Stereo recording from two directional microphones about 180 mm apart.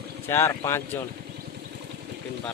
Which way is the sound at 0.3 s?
15° left (ahead or behind).